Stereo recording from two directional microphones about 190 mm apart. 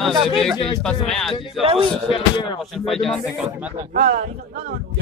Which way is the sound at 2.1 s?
25° left (ahead or behind).